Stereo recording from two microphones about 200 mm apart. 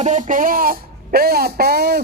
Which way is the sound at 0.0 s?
40° right (ahead or behind).